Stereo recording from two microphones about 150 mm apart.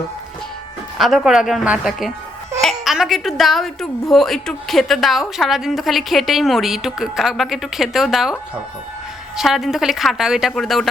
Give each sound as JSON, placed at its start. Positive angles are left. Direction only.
{"t": 0.9, "sound": "a woman's voice", "side_deg": 0}
{"t": 2.6, "sound": "a sound", "side_deg": 0}
{"t": 4.1, "sound": "a woman's voice", "side_deg": 0}